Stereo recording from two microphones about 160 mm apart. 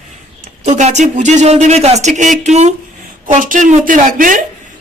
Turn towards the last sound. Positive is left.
turn(degrees=-55)  # may be behind; listen again after turning